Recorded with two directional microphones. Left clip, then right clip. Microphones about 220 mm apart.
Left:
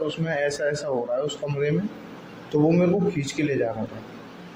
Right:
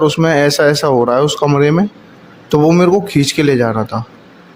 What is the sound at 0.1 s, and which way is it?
Speech, 50° right (ahead or behind).